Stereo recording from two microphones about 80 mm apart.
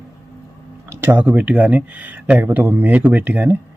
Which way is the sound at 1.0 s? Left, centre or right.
Right.